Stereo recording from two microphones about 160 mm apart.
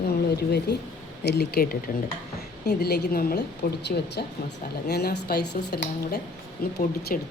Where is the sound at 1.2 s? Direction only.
90° left.